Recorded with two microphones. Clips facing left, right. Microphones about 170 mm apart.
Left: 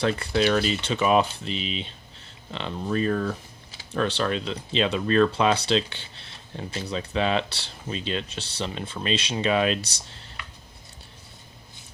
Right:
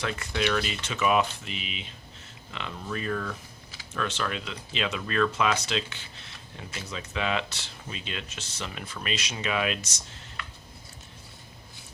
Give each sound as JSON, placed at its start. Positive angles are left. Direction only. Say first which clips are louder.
{"t": 0.0, "sound": "speech", "louder": "left 6 dB", "side_deg": 35}